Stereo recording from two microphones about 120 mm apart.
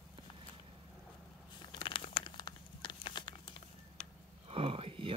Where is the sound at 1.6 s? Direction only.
40° left (ahead or behind).